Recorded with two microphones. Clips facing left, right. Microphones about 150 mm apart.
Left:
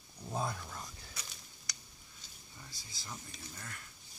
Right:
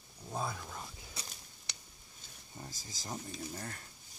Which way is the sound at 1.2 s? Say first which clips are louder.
Right 3 dB; 30° right (ahead or behind).